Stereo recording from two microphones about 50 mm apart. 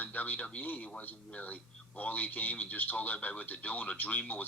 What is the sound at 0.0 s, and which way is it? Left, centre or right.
Speech, left.